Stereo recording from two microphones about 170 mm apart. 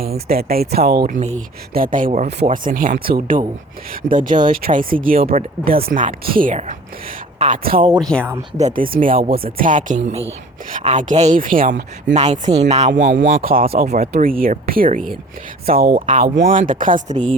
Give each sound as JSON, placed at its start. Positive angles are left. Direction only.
{"t": 0.0, "sound": "speech", "side_deg": -65}
{"t": 1.7, "sound": "speech", "side_deg": -55}
{"t": 7.8, "sound": "speech", "side_deg": -30}
{"t": 8.0, "sound": "speech", "side_deg": 5}
{"t": 8.5, "sound": "speech", "side_deg": -50}
{"t": 12.1, "sound": "speech", "side_deg": -40}
{"t": 13.2, "sound": "speech", "side_deg": -55}
{"t": 16.0, "sound": "speech", "side_deg": -45}